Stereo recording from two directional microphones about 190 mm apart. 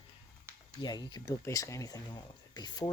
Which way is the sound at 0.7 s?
20° left (ahead or behind).